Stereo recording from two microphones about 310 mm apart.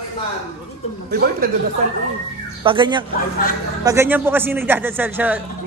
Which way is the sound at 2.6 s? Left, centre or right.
Centre.